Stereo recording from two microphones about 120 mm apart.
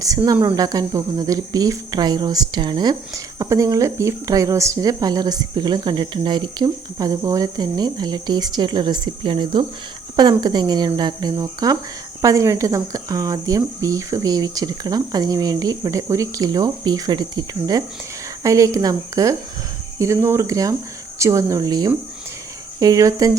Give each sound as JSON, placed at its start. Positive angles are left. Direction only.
{"t": 0.4, "sound": "speech", "side_deg": -30}
{"t": 3.3, "sound": "speech", "side_deg": -30}